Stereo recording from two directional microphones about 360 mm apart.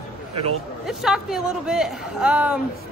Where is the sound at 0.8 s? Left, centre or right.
Centre.